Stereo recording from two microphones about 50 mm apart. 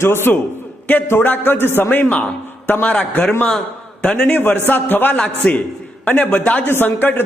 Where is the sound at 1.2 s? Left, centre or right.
Left.